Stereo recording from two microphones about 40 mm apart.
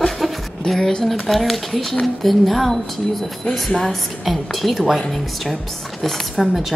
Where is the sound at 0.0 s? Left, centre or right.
Centre.